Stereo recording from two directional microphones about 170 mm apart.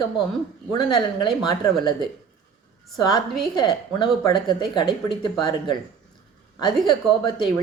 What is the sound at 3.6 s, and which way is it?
A woman's voice, 25° left (ahead or behind).